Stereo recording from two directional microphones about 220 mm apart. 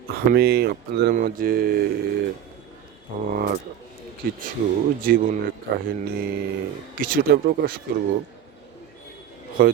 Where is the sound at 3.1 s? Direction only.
40° right (ahead or behind).